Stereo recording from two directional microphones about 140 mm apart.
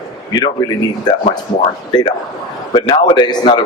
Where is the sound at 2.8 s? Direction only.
35° left (ahead or behind).